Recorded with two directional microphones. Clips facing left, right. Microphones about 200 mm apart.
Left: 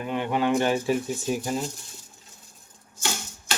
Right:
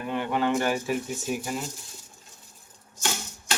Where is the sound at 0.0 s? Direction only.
20° left (ahead or behind).